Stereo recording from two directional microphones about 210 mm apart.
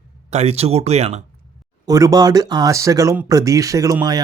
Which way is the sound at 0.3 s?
30° right (ahead or behind).